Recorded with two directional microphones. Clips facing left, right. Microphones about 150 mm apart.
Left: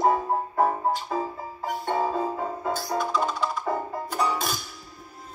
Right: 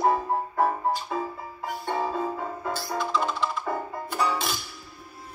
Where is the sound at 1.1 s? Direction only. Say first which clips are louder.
Left 2 dB; 25° left (ahead or behind).